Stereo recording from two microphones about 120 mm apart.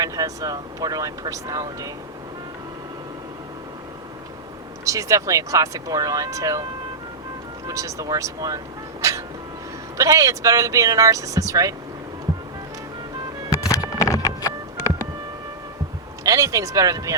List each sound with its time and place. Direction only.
0.0 s speech: 30° right (ahead or behind)
4.9 s speech: 25° right (ahead or behind)
7.7 s speech: 25° right (ahead or behind)
13.5 s music: 30° left (ahead or behind)
16.2 s speech: 30° right (ahead or behind)